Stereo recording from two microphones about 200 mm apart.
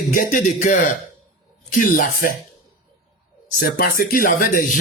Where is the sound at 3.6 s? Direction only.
45° left (ahead or behind).